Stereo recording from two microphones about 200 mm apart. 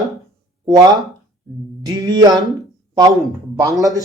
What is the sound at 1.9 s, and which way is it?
Speech, 20° right (ahead or behind).